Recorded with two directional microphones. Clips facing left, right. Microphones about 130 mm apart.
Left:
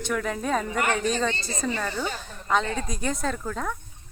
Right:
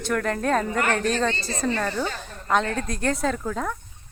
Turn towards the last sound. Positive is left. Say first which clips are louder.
# right 3 dB
turn(degrees=0)  # may be behind; listen again after turning